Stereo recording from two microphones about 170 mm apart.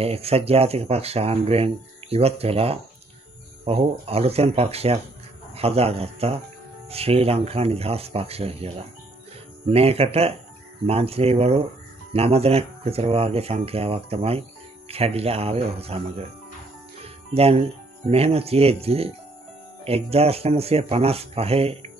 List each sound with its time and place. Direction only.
0.0 s speech: 35° right (ahead or behind)
17.0 s music: 35° right (ahead or behind)
18.1 s speech: 35° right (ahead or behind)